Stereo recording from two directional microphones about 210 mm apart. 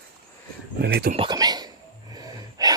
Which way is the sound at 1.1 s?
20° right (ahead or behind).